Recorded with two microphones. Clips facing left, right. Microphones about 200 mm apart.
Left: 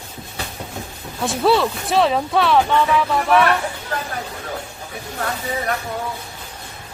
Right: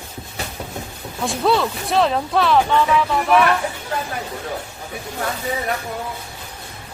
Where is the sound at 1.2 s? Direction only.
Centre (ahead or behind).